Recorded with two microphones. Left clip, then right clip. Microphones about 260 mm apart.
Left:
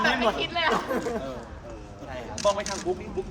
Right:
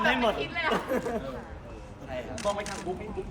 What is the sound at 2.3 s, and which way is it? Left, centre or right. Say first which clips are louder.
Speech: left 7 dB; right.